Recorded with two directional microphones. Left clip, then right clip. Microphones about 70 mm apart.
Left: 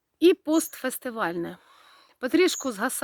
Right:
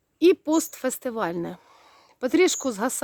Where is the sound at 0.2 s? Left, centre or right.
Right.